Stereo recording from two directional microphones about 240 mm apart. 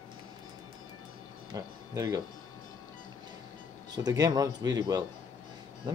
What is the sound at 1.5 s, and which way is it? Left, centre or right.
Speech, centre.